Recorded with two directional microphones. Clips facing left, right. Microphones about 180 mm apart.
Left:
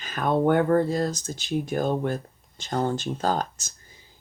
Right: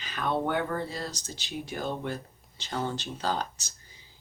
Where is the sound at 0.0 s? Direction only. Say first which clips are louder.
Left 7 dB; 50° left (ahead or behind).